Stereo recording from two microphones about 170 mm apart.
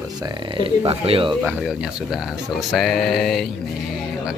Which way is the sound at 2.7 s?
Centre (ahead or behind).